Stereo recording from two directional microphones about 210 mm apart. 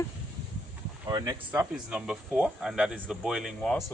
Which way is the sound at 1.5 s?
5° right (ahead or behind).